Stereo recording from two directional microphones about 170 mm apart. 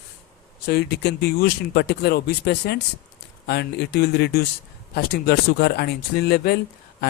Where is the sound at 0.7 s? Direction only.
70° left (ahead or behind).